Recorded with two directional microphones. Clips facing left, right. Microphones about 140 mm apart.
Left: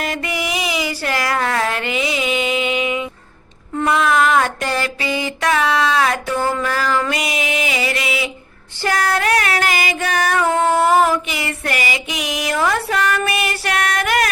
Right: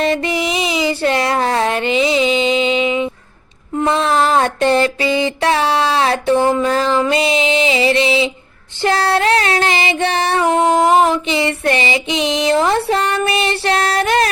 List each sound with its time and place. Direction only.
0.0 s child singing: 25° right (ahead or behind)
10.4 s female singing: 15° right (ahead or behind)